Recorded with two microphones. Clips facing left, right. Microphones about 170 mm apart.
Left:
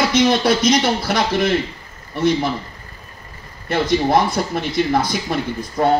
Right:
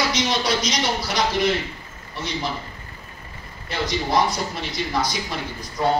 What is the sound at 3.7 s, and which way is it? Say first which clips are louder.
Speech: left 8 dB; 55° left (ahead or behind).